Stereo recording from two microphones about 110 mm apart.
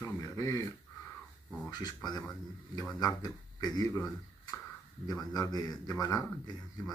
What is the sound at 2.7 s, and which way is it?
A man's voice, 35° left (ahead or behind).